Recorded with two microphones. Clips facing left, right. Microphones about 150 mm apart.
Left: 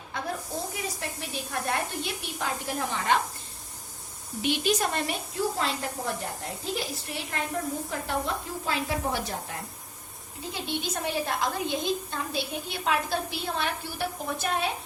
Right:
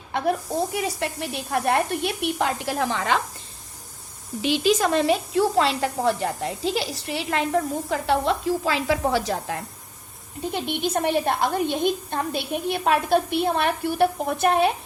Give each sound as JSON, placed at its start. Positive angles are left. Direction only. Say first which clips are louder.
{"t": 0.1, "sound": "speech", "louder": "right 9 dB", "side_deg": -70}
{"t": 4.4, "sound": "a woman's voice", "louder": "right 6 dB", "side_deg": -90}
{"t": 10.5, "sound": "a woman's voice", "louder": "right 7 dB", "side_deg": -60}